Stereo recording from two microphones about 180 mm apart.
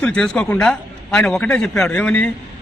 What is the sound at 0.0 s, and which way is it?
A man's voice, 5° left (ahead or behind).